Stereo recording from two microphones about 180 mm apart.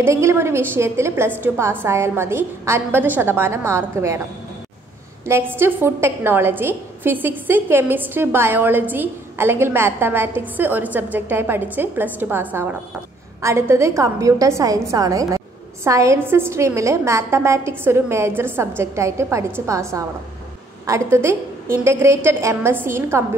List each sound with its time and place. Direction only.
0.0 s a woman's voice: 15° right (ahead or behind)
5.2 s a woman's voice: 15° right (ahead or behind)